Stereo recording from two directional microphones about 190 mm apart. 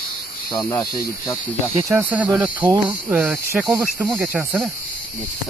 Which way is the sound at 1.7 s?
10° right (ahead or behind).